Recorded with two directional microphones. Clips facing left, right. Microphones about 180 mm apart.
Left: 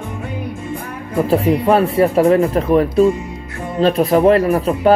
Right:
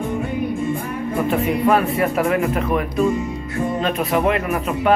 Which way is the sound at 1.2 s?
35° left (ahead or behind).